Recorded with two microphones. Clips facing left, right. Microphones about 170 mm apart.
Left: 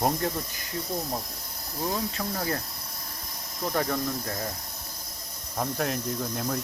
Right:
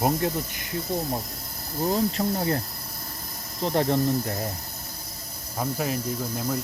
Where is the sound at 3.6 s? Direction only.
25° right (ahead or behind).